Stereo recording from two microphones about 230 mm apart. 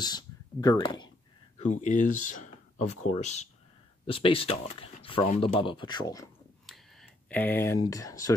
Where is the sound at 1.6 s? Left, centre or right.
Left; by 6.2 s centre.